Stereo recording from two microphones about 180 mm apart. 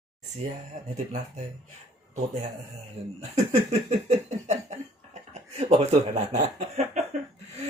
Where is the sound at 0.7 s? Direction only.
40° right (ahead or behind).